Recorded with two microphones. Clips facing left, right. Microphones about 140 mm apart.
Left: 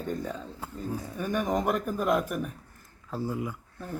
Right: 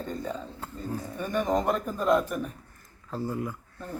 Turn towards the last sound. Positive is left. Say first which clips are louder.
# even
turn(degrees=0)  # may be behind; listen again after turning